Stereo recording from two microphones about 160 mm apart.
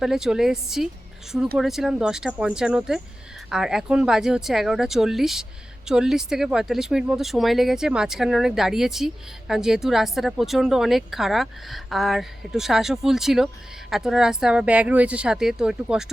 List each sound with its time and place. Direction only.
0.0 s speech: 5° right (ahead or behind)